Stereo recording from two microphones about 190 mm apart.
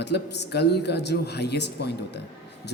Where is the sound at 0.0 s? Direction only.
65° left (ahead or behind).